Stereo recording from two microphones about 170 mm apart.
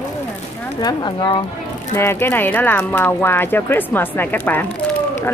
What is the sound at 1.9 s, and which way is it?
Speech, 15° left (ahead or behind).